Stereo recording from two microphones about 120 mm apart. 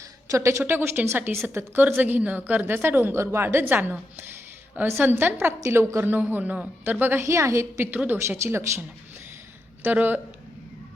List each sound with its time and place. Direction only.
0.3 s a woman's voice: 25° right (ahead or behind)
9.8 s a woman's voice: 15° right (ahead or behind)